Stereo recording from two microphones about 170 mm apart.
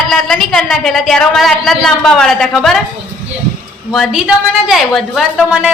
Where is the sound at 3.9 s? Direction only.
Centre (ahead or behind).